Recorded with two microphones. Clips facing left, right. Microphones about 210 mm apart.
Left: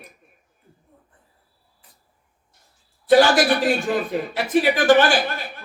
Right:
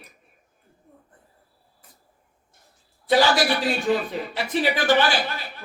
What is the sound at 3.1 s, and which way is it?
A man's voice, 50° left (ahead or behind).